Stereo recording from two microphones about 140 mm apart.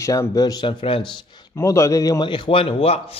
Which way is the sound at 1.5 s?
20° left (ahead or behind).